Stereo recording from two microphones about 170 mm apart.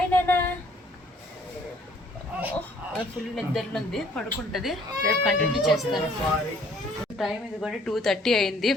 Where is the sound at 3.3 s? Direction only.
Centre (ahead or behind).